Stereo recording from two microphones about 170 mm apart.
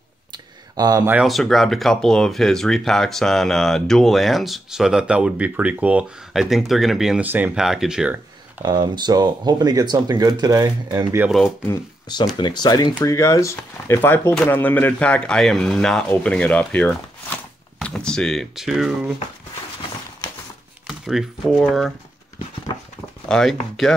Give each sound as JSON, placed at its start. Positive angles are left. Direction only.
{"t": 0.3, "sound": "a sound", "side_deg": -25}
{"t": 1.1, "sound": "speech", "side_deg": 0}
{"t": 8.6, "sound": "speech", "side_deg": -25}
{"t": 11.1, "sound": "speech", "side_deg": -5}
{"t": 11.4, "sound": "speech", "side_deg": 15}
{"t": 12.4, "sound": "speech", "side_deg": 25}
{"t": 20.8, "sound": "speech", "side_deg": 0}
{"t": 23.2, "sound": "speech", "side_deg": 5}